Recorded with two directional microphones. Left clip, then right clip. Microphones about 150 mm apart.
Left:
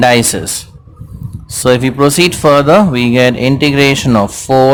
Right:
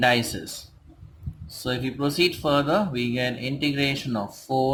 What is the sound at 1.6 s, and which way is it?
Speech, 50° left (ahead or behind).